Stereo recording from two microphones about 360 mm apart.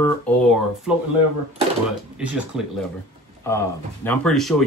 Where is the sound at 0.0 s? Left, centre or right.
Centre.